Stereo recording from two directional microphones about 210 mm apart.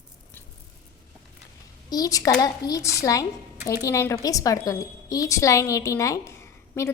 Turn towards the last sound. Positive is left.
turn(degrees=15)  # may be behind; listen again after turning